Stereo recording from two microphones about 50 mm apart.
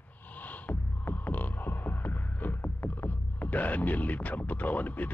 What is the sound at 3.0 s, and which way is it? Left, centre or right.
Speech, left.